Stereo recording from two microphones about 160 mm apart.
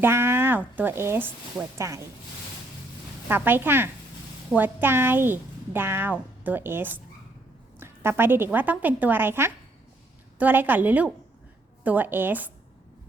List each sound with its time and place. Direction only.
0.0 s speech: 15° right (ahead or behind)
3.2 s a woman's voice: 15° right (ahead or behind)
7.8 s a sound: 15° right (ahead or behind)
8.5 s a woman's voice: 10° right (ahead or behind)